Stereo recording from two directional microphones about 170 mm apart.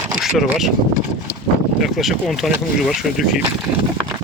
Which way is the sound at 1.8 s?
Centre (ahead or behind).